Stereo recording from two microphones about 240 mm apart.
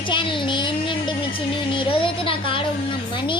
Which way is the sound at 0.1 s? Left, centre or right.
Left.